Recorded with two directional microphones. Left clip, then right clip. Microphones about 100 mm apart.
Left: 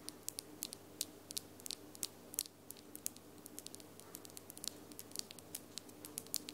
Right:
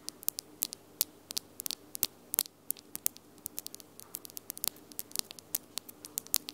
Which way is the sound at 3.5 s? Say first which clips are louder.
Right 6 dB; 30° right (ahead or behind).